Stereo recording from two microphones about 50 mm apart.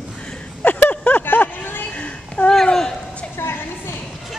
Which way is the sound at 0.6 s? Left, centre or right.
Left.